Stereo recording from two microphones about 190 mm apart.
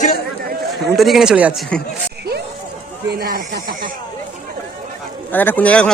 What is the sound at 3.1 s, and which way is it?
Speech, 50° right (ahead or behind).